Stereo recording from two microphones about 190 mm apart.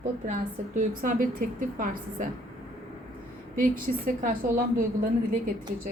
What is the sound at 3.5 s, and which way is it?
Speech, 45° right (ahead or behind).